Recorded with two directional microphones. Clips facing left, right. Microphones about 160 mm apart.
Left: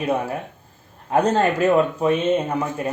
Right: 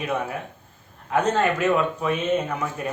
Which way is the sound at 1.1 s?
35° left (ahead or behind).